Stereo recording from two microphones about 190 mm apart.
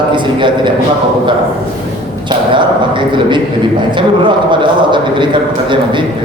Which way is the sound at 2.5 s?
25° right (ahead or behind).